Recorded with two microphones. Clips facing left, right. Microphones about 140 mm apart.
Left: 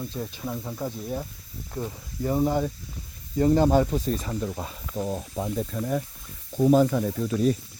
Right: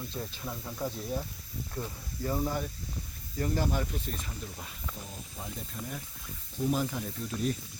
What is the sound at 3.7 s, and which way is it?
Speech, 80° left.